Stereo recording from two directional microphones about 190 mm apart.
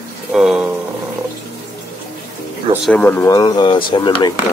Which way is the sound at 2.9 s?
10° left (ahead or behind).